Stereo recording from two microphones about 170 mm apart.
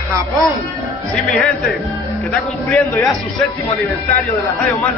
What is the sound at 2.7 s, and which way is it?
Speech, 15° left (ahead or behind).